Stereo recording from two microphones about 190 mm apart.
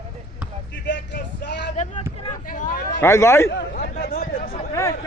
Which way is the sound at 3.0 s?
15° left (ahead or behind).